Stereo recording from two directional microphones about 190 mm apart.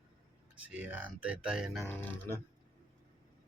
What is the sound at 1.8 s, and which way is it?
Speech, 10° left (ahead or behind).